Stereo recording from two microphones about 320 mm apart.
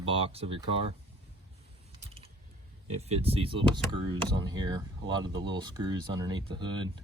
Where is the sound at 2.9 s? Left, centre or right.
Centre.